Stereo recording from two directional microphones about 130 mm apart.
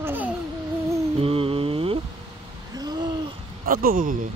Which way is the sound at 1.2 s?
45° right (ahead or behind).